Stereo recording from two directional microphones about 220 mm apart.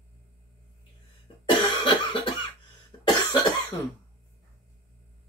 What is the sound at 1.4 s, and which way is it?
Cough, 20° left (ahead or behind).